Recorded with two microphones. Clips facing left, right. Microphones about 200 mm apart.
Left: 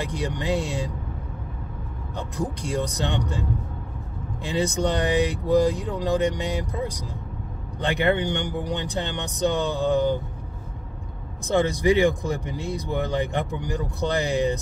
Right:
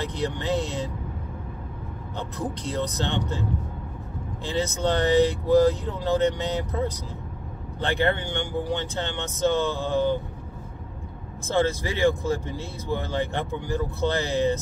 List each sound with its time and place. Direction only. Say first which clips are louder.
0.0 s speech: even; 15° left (ahead or behind)
2.1 s speech: left 2 dB; 15° left (ahead or behind)
11.4 s speech: left 4 dB; 15° left (ahead or behind)